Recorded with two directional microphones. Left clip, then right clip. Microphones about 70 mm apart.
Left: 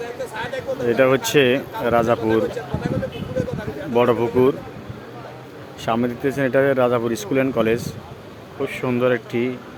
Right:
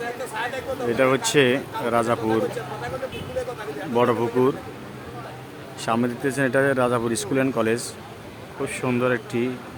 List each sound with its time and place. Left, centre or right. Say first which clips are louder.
0.3 s speech: left 2 dB; left
3.4 s a sound: left 3 dB; left
3.9 s speech: left 3 dB; left
5.8 s speech: left 2 dB; centre